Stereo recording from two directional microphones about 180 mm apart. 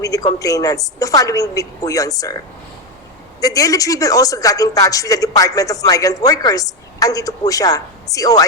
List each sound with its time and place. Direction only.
0.0 s speech: 20° left (ahead or behind)
3.4 s speech: 20° left (ahead or behind)